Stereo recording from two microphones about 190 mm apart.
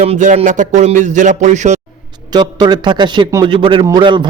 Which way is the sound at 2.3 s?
20° right (ahead or behind).